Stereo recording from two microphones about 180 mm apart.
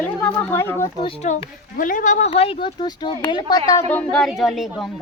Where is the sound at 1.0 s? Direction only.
40° left (ahead or behind).